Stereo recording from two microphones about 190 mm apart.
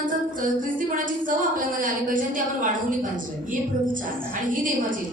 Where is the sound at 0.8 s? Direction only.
45° right (ahead or behind).